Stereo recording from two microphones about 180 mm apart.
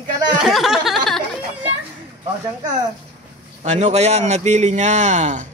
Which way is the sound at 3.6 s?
40° right (ahead or behind).